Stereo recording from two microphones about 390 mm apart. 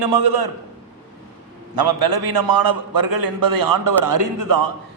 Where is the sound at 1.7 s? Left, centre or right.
Right.